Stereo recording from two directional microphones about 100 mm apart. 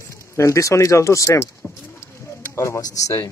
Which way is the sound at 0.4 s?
30° left (ahead or behind).